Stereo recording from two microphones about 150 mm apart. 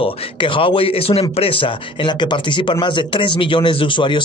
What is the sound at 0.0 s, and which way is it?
Speech, 35° left (ahead or behind).